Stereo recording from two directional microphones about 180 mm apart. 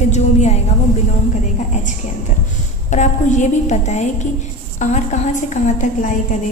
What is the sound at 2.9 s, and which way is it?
A woman's voice, 40° left (ahead or behind).